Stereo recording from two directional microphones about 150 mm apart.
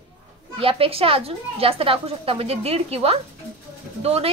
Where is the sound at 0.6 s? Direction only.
40° right (ahead or behind).